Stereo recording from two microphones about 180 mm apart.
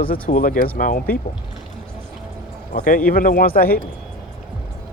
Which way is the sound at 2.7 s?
45° left (ahead or behind).